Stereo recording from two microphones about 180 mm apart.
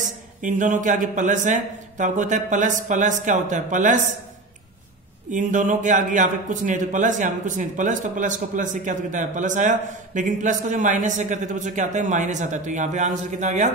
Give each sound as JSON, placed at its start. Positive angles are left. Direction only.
{"t": 0.0, "sound": "a man's voice", "side_deg": -45}
{"t": 5.3, "sound": "a man's voice", "side_deg": -45}